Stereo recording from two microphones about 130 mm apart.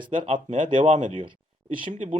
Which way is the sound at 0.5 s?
80° right.